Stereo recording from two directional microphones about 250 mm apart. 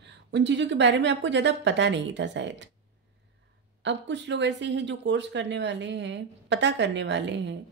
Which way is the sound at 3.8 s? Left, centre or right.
Right.